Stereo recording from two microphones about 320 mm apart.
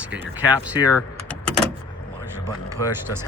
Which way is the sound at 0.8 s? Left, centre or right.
Centre.